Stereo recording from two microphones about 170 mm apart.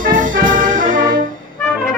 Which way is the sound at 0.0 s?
50° right (ahead or behind).